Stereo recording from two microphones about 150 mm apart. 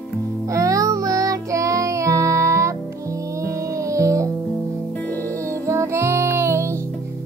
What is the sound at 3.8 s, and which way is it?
Music, 20° right (ahead or behind).